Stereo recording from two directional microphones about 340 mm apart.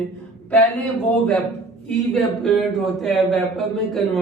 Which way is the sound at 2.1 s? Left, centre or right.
Centre.